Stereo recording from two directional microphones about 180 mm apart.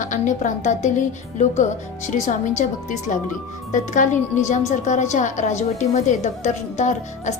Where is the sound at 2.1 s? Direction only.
45° left (ahead or behind).